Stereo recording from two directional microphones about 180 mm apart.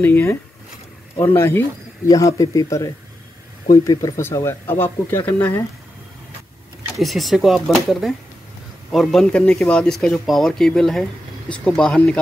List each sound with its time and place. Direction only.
0.0 s speech: 15° left (ahead or behind)
7.0 s speech: centre (ahead or behind)